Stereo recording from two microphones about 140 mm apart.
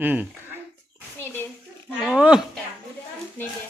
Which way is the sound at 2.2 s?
5° right (ahead or behind).